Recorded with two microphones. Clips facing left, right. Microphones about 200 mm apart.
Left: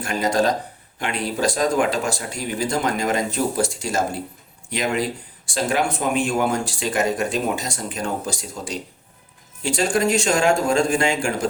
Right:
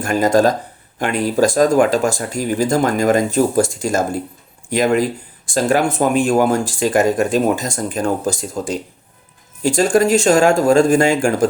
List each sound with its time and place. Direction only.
0.0 s speech: 45° right (ahead or behind)